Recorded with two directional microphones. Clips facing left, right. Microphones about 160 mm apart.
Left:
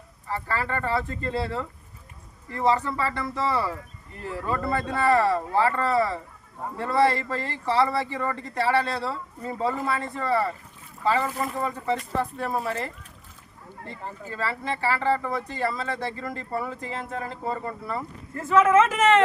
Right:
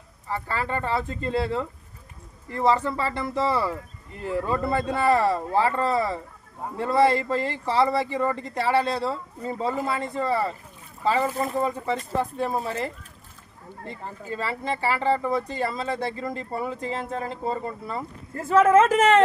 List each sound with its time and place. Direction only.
0.3 s speech: 20° right (ahead or behind)
18.3 s speech: 35° right (ahead or behind)